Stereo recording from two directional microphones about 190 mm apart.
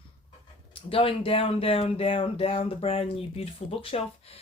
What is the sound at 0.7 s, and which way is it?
Speech, 30° left (ahead or behind).